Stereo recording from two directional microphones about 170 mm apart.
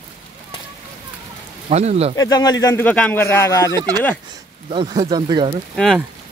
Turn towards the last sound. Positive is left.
turn(degrees=0)  # may be behind; listen again after turning